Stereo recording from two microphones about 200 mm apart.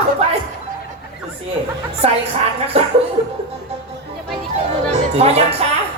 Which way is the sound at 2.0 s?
30° right (ahead or behind).